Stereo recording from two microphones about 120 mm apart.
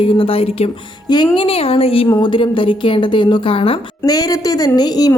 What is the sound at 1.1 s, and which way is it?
A woman's voice, 40° left (ahead or behind).